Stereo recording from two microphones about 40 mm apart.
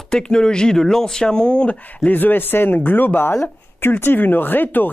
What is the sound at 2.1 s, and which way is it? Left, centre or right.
Speech, left.